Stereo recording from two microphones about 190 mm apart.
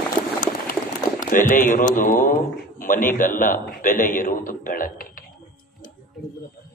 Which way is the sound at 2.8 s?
45° left (ahead or behind).